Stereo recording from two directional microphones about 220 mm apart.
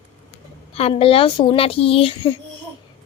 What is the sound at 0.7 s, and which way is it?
Speech, 25° left (ahead or behind).